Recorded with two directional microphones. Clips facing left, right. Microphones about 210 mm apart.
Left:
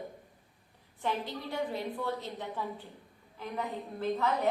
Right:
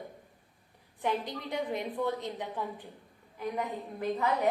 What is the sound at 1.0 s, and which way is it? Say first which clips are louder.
A woman's voice: right 2 dB; 15° right (ahead or behind).